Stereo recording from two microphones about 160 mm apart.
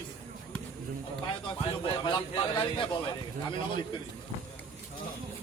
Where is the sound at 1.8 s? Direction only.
30° left (ahead or behind).